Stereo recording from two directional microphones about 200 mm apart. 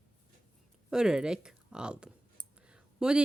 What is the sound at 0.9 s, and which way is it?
Speech, 5° right (ahead or behind).